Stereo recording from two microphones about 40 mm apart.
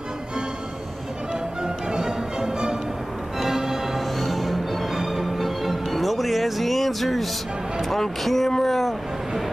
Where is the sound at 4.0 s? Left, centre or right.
Centre.